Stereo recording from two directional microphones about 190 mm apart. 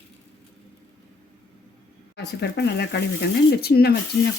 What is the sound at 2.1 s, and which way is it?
Speech, 60° left (ahead or behind).